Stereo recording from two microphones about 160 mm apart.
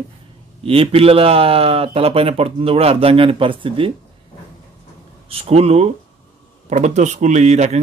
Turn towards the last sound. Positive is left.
turn(degrees=-45)  # may be behind; listen again after turning